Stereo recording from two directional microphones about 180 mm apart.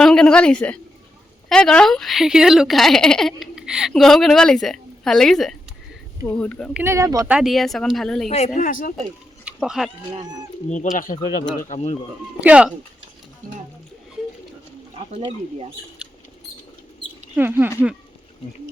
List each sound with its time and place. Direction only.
0.0 s a woman's voice: 5° left (ahead or behind)
6.7 s speech: 15° right (ahead or behind)
7.3 s a woman's voice: centre (ahead or behind)
8.3 s speech: 40° left (ahead or behind)
9.4 s a sound: 5° right (ahead or behind)
10.9 s speech: 50° left (ahead or behind)
12.4 s speech: 5° right (ahead or behind)
14.9 s a sound: 30° right (ahead or behind)
17.3 s speech: 10° right (ahead or behind)